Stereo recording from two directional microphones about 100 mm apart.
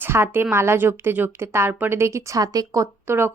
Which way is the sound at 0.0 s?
25° right (ahead or behind).